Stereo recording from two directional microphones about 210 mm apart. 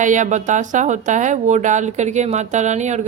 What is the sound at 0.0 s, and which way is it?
Speech, 35° right (ahead or behind).